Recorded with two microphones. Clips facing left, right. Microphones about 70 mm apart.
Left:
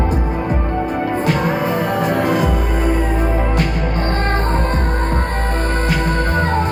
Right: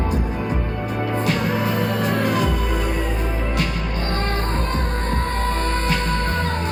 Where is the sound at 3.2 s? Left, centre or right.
Left.